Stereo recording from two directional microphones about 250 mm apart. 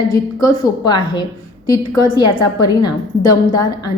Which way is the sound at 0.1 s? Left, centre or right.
Centre.